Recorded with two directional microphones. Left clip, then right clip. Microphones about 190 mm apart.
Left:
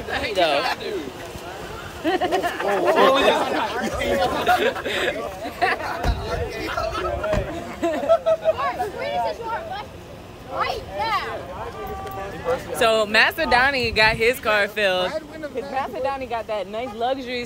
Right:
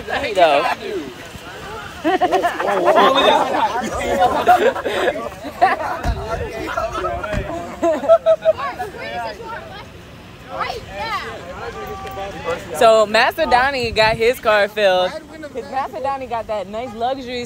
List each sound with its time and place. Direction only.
0.1 s speech: 15° right (ahead or behind)
2.0 s speech: 25° right (ahead or behind); by 7.1 s 5° right (ahead or behind)
7.8 s a sound: 5° right (ahead or behind)
8.5 s a sound: 40° left (ahead or behind)
10.6 s speech: 30° left (ahead or behind)
12.4 s speech: centre (ahead or behind)